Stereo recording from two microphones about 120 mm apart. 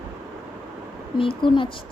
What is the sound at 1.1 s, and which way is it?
Speech, 45° left (ahead or behind).